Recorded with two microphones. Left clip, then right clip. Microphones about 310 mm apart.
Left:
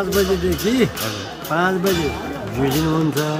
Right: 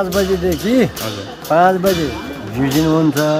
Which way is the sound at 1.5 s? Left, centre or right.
Centre.